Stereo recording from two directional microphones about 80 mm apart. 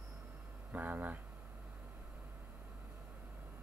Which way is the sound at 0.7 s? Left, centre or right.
Right.